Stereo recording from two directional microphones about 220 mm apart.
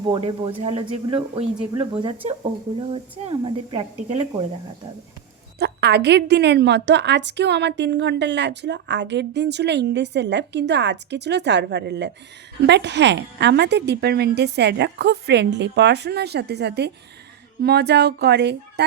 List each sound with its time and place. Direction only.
0.0 s speech: 20° right (ahead or behind)
5.5 s a woman's voice: 50° right (ahead or behind)